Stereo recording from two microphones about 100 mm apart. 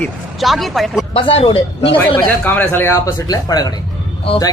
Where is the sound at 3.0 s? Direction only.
40° left (ahead or behind).